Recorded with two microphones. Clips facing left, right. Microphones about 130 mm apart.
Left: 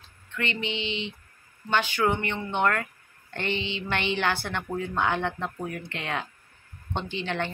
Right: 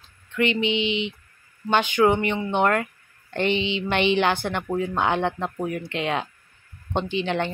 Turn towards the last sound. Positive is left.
turn(degrees=-15)  # may be behind; listen again after turning